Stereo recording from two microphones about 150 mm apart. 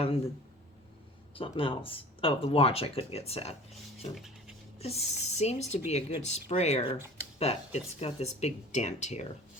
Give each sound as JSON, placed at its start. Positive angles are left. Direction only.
{"t": 1.4, "sound": "speech", "side_deg": 35}
{"t": 4.8, "sound": "speech", "side_deg": 45}